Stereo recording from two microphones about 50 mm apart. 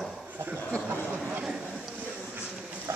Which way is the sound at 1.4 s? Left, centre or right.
Centre.